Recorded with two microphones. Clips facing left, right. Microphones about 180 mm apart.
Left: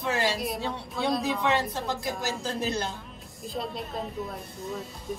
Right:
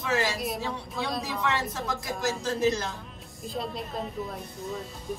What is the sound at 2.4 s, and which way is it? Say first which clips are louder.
Speech: right 5 dB; 30° left (ahead or behind).